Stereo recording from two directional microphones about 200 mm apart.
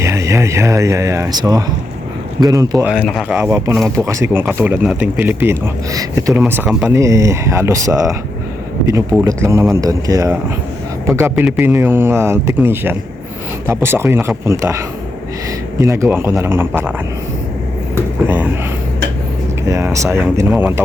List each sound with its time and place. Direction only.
0.0 s speech: 15° right (ahead or behind)
2.8 s speech: centre (ahead or behind)
3.3 s speech: 10° right (ahead or behind)
9.2 s speech: 15° right (ahead or behind)
17.9 s speech: 10° right (ahead or behind)
19.6 s speech: 15° right (ahead or behind)